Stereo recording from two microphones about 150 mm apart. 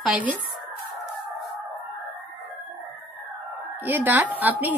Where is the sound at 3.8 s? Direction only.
10° right (ahead or behind).